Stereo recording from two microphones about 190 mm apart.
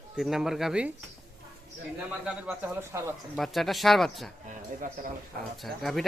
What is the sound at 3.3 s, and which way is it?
Speech, centre (ahead or behind).